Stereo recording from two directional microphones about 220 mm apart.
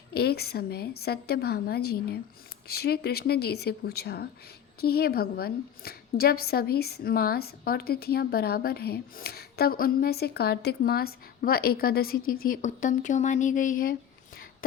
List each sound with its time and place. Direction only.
0.1 s a woman's voice: 45° left (ahead or behind)